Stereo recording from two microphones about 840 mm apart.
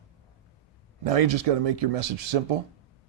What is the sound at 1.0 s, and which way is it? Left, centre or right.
Speech, right.